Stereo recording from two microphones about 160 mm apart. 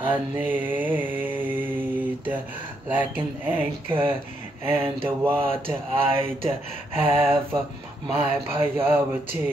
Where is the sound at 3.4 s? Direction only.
10° right (ahead or behind).